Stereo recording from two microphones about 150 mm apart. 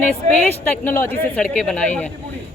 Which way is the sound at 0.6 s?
10° left (ahead or behind).